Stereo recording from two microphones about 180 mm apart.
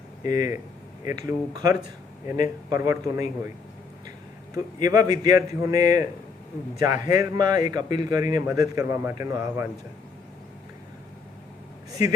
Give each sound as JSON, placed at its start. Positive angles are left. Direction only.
{"t": 0.2, "sound": "a man's voice", "side_deg": -20}
{"t": 4.5, "sound": "a man's voice", "side_deg": -20}
{"t": 7.1, "sound": "a man's voice", "side_deg": -20}
{"t": 11.9, "sound": "vehicle", "side_deg": -20}